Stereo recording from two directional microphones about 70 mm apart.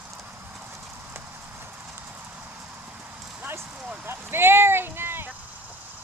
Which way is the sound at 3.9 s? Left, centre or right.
Right.